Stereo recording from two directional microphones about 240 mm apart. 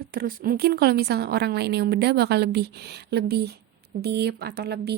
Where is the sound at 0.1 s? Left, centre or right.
Right.